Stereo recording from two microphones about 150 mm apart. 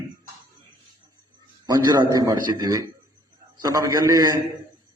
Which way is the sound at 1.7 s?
25° right (ahead or behind).